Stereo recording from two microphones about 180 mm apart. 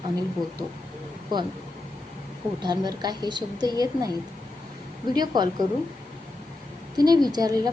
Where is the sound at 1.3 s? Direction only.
25° right (ahead or behind).